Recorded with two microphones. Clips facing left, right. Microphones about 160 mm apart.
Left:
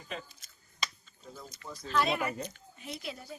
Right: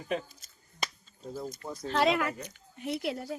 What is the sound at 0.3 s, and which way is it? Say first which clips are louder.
Speech: right 2 dB; 40° right (ahead or behind).